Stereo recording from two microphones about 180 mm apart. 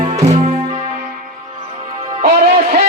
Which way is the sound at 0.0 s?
35° right (ahead or behind).